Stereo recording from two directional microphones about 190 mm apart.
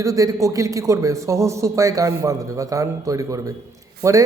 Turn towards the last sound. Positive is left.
turn(degrees=-15)  # may be behind; listen again after turning